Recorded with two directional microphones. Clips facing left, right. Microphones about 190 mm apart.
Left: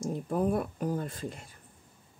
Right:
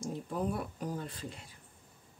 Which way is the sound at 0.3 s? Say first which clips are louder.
Left 7 dB; 50° left (ahead or behind).